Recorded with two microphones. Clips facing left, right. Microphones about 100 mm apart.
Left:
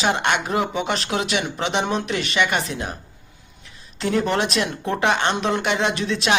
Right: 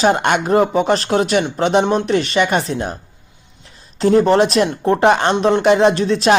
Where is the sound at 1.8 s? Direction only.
30° right (ahead or behind).